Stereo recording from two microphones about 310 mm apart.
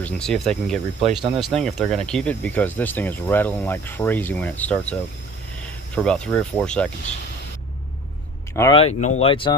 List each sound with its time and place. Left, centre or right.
0.0 s speech: centre
8.5 s speech: centre